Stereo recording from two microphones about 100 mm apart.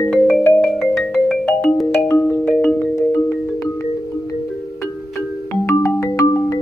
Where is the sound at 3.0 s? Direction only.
30° left (ahead or behind).